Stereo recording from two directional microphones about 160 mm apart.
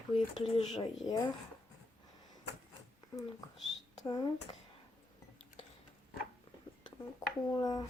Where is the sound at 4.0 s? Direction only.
25° left (ahead or behind).